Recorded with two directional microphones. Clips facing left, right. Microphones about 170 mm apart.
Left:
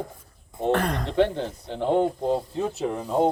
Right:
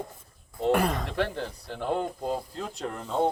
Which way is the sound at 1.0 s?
25° left (ahead or behind).